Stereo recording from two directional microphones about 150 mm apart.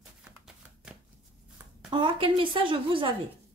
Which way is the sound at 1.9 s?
35° right (ahead or behind).